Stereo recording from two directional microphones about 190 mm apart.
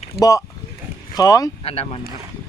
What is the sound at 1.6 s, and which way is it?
Speech, 30° left (ahead or behind).